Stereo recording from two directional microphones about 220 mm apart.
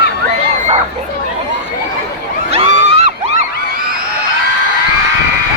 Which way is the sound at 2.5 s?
30° right (ahead or behind).